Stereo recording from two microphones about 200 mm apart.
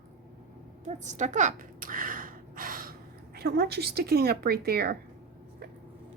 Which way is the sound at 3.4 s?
50° right (ahead or behind).